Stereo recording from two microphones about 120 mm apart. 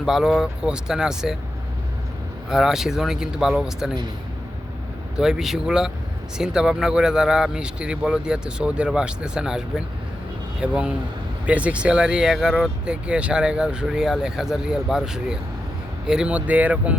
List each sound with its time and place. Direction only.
0.0 s speech: 5° right (ahead or behind)
2.5 s speech: 5° right (ahead or behind)
5.1 s speech: 5° right (ahead or behind)